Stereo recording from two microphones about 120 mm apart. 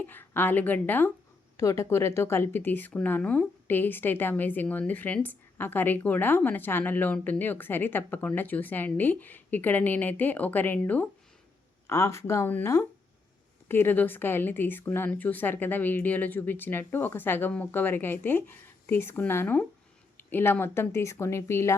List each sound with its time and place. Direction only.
0.0 s speech: 15° left (ahead or behind)
11.9 s speech: 25° left (ahead or behind)